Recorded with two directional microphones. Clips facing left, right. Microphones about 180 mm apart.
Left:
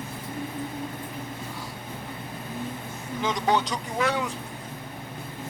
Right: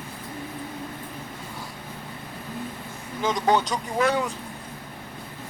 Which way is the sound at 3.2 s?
45° right (ahead or behind).